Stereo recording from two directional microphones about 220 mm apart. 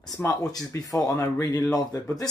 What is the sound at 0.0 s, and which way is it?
Speech, 15° left (ahead or behind).